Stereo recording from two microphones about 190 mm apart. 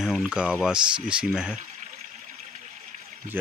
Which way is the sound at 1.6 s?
40° right (ahead or behind).